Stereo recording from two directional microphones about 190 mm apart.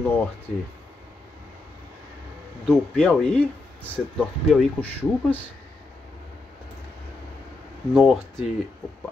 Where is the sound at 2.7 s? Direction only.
5° left (ahead or behind).